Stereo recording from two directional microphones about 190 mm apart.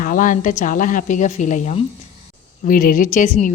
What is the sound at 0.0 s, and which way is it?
Speech, 45° left (ahead or behind).